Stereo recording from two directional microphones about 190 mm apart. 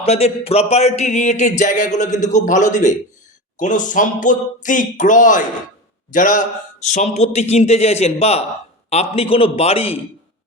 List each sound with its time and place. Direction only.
0.0 s speech: 35° left (ahead or behind)